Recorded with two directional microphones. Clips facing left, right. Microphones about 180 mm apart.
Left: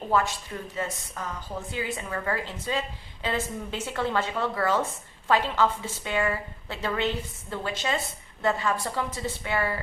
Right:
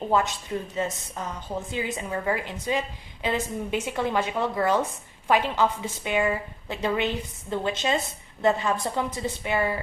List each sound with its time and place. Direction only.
0.1 s a woman's voice: 20° right (ahead or behind)